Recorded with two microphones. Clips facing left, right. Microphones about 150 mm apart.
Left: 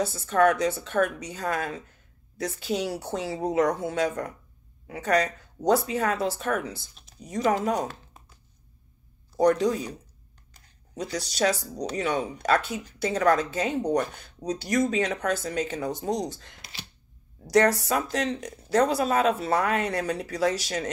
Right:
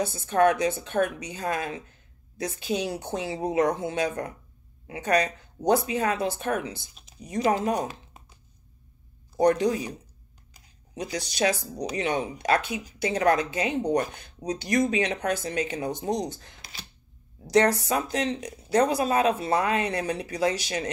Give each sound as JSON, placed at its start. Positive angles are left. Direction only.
{"t": 0.0, "sound": "speech", "side_deg": -20}
{"t": 5.1, "sound": "speech", "side_deg": -20}
{"t": 7.6, "sound": "a sound", "side_deg": -15}
{"t": 9.5, "sound": "speech", "side_deg": -15}
{"t": 10.5, "sound": "a sound", "side_deg": -15}
{"t": 11.7, "sound": "speech", "side_deg": -10}
{"t": 17.6, "sound": "speech", "side_deg": -20}
{"t": 18.4, "sound": "speech", "side_deg": -5}
{"t": 18.7, "sound": "speech", "side_deg": -15}